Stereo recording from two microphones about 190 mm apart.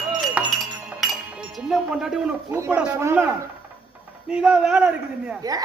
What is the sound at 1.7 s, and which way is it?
Speech, 5° right (ahead or behind).